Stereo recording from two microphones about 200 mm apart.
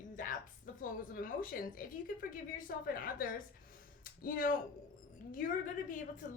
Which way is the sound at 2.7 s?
45° left (ahead or behind).